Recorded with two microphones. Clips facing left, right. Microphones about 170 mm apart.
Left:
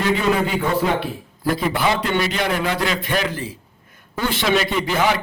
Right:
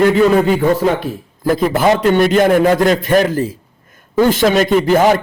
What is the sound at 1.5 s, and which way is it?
A man's voice, 45° right (ahead or behind).